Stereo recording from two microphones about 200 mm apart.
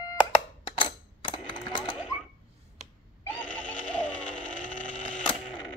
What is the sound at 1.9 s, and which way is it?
Sewing machine, 5° right (ahead or behind).